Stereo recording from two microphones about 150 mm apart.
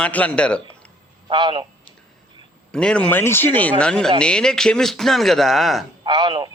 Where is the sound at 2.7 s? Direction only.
5° left (ahead or behind).